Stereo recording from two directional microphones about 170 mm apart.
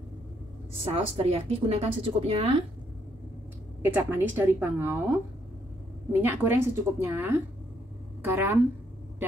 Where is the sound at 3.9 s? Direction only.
10° right (ahead or behind).